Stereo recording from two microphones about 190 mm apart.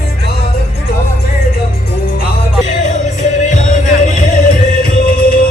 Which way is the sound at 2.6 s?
40° left (ahead or behind).